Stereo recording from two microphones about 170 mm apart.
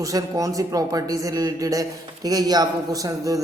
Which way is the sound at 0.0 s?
20° right (ahead or behind).